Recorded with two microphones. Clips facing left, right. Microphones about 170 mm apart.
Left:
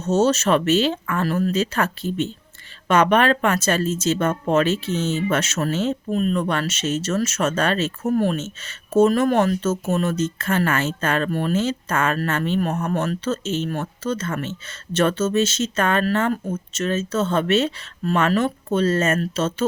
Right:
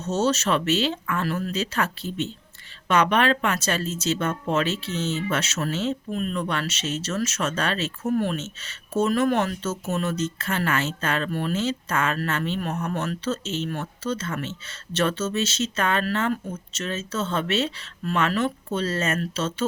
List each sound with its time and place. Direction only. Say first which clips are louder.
0.1 s speech: left 5 dB; 45° left (ahead or behind)